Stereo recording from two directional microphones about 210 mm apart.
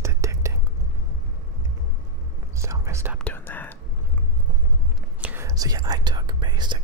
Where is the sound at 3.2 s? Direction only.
10° left (ahead or behind).